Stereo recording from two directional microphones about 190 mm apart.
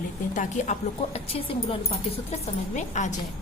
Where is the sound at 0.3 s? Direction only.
40° left (ahead or behind).